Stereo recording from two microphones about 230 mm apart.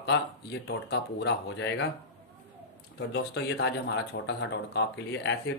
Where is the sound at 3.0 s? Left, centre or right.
Left.